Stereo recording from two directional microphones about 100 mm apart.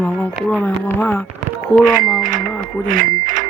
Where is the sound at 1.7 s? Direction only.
5° left (ahead or behind).